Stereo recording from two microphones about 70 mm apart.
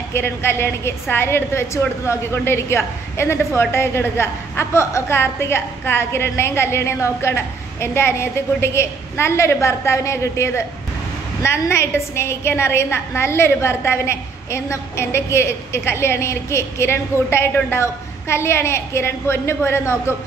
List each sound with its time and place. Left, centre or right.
0.1 s a woman's voice: left